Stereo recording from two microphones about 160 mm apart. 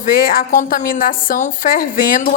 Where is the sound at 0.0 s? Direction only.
65° left (ahead or behind).